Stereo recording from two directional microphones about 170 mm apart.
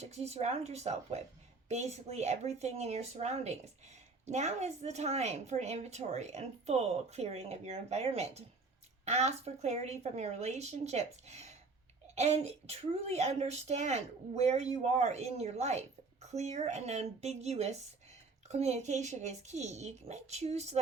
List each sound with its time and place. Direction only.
0.0 s speech: 40° right (ahead or behind)